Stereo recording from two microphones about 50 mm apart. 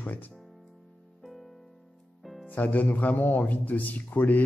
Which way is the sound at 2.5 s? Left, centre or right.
Left.